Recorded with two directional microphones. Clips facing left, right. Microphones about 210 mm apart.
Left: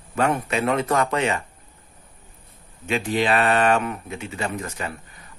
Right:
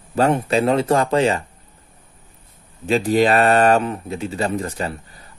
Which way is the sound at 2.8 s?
35° right (ahead or behind).